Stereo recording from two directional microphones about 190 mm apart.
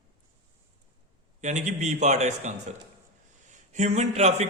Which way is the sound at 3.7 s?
35° right (ahead or behind).